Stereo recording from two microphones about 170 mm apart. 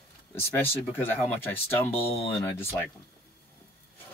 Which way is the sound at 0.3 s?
15° left (ahead or behind).